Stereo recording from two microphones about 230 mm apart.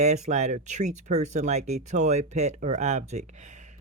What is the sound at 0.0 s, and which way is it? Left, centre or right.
Speech, right.